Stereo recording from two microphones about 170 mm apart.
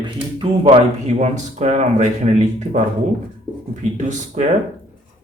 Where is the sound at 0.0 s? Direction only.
30° right (ahead or behind).